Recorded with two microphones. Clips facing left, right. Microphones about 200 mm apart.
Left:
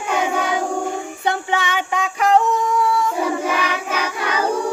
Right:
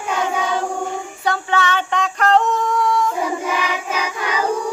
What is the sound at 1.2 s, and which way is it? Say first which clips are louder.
Female singing: right 2 dB; 20° left (ahead or behind).